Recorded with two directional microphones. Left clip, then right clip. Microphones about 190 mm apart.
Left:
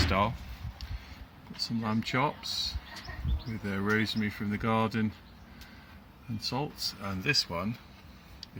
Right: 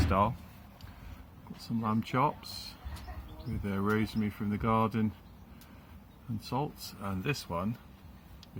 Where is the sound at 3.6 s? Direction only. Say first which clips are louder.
Left 3 dB; 10° left (ahead or behind).